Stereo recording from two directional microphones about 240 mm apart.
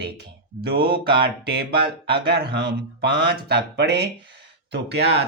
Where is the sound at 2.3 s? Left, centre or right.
Right.